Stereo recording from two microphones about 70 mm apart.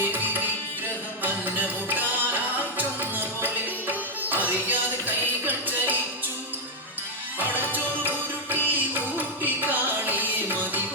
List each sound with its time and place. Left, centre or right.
1.2 s music: right
7.7 s music: right